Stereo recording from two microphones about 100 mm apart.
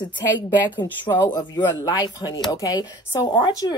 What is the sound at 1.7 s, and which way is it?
A woman's voice, 40° left (ahead or behind).